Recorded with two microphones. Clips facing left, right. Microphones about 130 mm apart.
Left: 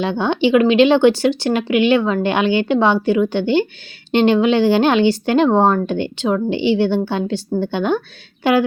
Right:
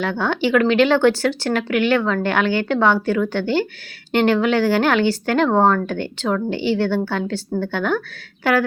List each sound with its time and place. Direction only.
0.0 s speech: 20° left (ahead or behind)